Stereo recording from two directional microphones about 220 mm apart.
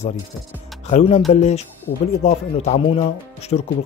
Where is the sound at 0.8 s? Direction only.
30° left (ahead or behind).